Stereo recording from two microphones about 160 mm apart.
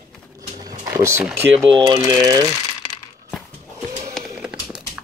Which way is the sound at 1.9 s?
25° right (ahead or behind).